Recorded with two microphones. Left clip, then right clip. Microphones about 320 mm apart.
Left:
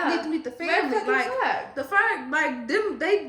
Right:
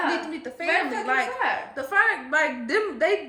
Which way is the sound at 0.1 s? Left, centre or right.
Centre.